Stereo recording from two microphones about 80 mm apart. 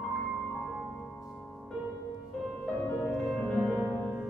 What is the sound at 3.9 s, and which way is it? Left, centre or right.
Music, left.